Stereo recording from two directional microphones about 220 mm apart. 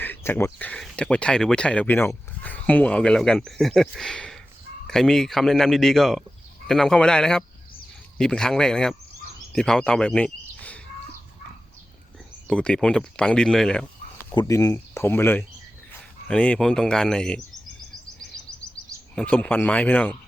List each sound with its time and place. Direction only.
0.0 s speech: 10° left (ahead or behind)
12.5 s speech: 5° left (ahead or behind)
14.3 s speech: 15° left (ahead or behind)
19.1 s speech: 5° left (ahead or behind)